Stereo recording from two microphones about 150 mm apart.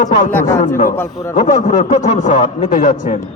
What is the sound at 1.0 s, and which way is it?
Speech, 20° left (ahead or behind).